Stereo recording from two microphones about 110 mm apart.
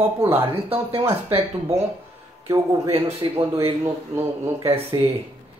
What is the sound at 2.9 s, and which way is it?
Speech, 65° right (ahead or behind).